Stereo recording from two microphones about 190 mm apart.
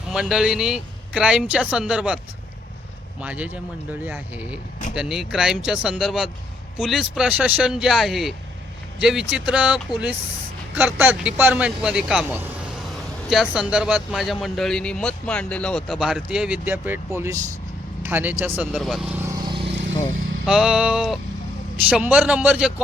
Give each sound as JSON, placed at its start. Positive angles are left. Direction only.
{"t": 0.1, "sound": "speech", "side_deg": -5}
{"t": 18.8, "sound": "speech", "side_deg": 0}
{"t": 19.5, "sound": "vehicle", "side_deg": -25}
{"t": 20.4, "sound": "speech", "side_deg": -5}